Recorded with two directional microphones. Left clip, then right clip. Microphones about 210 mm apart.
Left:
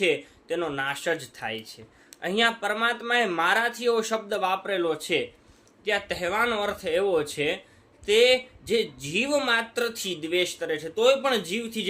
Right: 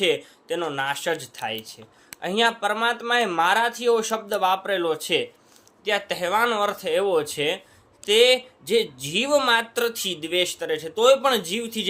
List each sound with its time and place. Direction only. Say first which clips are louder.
0.0 s speech: right 2 dB; 15° left (ahead or behind)